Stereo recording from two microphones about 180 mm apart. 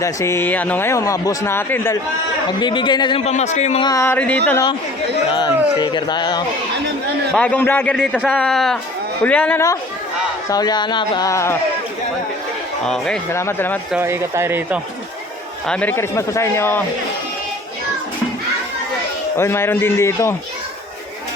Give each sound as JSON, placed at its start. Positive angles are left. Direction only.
{"t": 0.0, "sound": "a man's voice", "side_deg": 15}
{"t": 2.6, "sound": "a man's voice", "side_deg": 25}
{"t": 3.8, "sound": "a man's voice", "side_deg": 20}
{"t": 5.3, "sound": "speech", "side_deg": 25}
{"t": 7.3, "sound": "a man's voice", "side_deg": 5}
{"t": 10.5, "sound": "speech", "side_deg": 20}
{"t": 12.8, "sound": "a man's voice", "side_deg": 5}
{"t": 13.9, "sound": "speech", "side_deg": -15}
{"t": 15.6, "sound": "a man's voice", "side_deg": 5}
{"t": 19.4, "sound": "a man's voice", "side_deg": 15}